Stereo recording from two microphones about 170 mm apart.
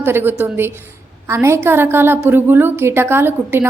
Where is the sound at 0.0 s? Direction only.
10° right (ahead or behind).